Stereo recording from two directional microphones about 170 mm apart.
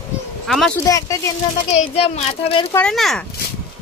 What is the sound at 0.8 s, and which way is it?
Speech, 20° left (ahead or behind).